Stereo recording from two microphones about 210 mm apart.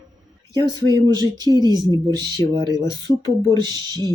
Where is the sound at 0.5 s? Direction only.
20° right (ahead or behind).